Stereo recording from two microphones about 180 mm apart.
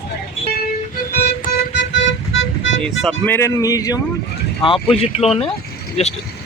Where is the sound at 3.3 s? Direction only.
15° left (ahead or behind).